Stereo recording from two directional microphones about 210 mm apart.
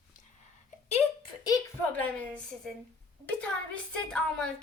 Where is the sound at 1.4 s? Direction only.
10° left (ahead or behind).